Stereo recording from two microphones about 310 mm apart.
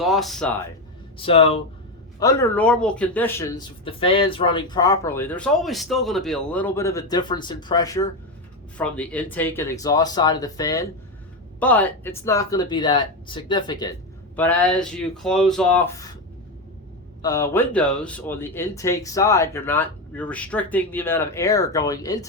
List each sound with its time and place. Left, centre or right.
0.0 s speech: centre
1.2 s speech: centre
17.2 s speech: centre